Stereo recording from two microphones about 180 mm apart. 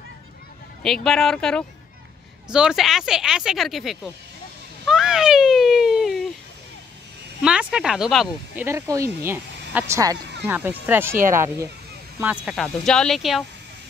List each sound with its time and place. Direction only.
0.8 s speech: centre (ahead or behind)
4.8 s a sound: 5° right (ahead or behind)
7.4 s speech: 5° right (ahead or behind)
8.6 s speech: 15° right (ahead or behind)
12.5 s speech: 5° left (ahead or behind)